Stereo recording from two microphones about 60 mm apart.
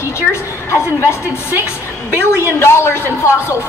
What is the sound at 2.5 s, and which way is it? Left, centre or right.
A woman's voice, left.